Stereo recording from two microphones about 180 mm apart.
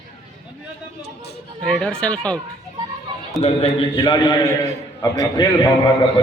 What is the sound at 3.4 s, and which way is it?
A man's voice, 30° left (ahead or behind).